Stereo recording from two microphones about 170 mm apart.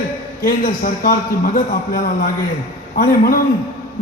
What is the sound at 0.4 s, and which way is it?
Speech, 55° left (ahead or behind).